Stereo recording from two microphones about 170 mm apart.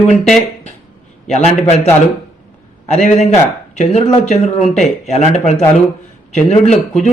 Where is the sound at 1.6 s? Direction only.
40° left (ahead or behind).